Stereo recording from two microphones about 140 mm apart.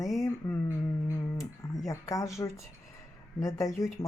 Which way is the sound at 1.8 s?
25° left (ahead or behind).